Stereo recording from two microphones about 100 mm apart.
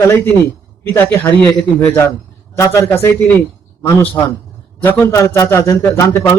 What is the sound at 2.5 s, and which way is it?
Speech, 30° left (ahead or behind).